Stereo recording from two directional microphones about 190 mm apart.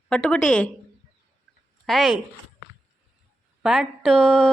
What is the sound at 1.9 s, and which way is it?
Speech, centre (ahead or behind).